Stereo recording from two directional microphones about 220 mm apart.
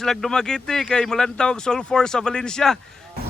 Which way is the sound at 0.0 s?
Centre (ahead or behind).